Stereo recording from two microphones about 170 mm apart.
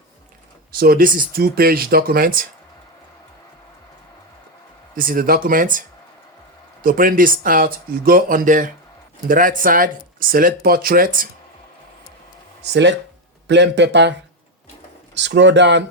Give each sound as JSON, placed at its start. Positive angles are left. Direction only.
{"t": 0.7, "sound": "speech", "side_deg": -60}
{"t": 4.9, "sound": "speech", "side_deg": -55}
{"t": 6.8, "sound": "speech", "side_deg": -55}
{"t": 12.7, "sound": "a man's voice", "side_deg": -90}